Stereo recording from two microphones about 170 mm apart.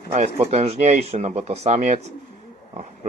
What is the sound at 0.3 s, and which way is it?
Speech, 40° right (ahead or behind).